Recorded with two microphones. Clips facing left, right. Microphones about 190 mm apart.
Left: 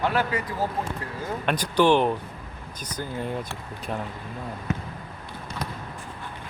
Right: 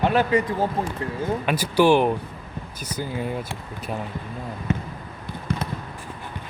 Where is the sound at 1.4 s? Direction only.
5° right (ahead or behind).